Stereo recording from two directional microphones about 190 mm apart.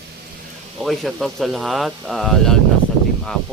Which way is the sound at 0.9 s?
Centre (ahead or behind).